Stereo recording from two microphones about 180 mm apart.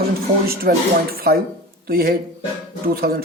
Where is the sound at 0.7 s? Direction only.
55° right (ahead or behind).